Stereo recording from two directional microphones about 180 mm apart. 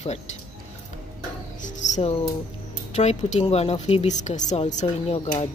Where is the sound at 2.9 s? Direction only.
40° left (ahead or behind).